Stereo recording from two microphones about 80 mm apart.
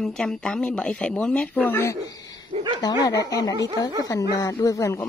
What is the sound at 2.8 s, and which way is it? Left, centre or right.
Speech, left.